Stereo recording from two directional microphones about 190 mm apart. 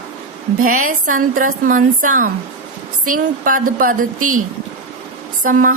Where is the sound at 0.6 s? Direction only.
45° right (ahead or behind).